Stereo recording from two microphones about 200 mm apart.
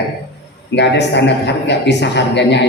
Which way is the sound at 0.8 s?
60° left (ahead or behind).